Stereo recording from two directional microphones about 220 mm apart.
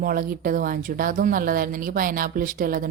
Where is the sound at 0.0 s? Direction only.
40° right (ahead or behind).